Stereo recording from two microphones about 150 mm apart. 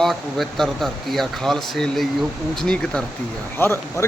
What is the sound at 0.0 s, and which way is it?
Speech, centre (ahead or behind).